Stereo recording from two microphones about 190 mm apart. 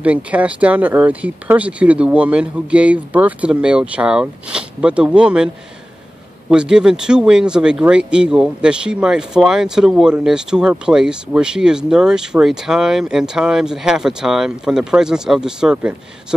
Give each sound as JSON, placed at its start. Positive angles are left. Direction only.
{"t": 0.0, "sound": "speech", "side_deg": -5}
{"t": 6.5, "sound": "speech", "side_deg": -5}